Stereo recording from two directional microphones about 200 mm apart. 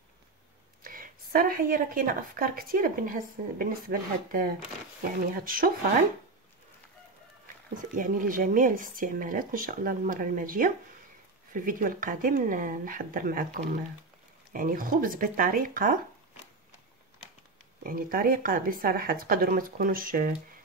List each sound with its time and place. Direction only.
0.8 s a woman's voice: 45° right (ahead or behind)
7.7 s a woman's voice: 40° right (ahead or behind)
17.8 s a woman's voice: 45° right (ahead or behind)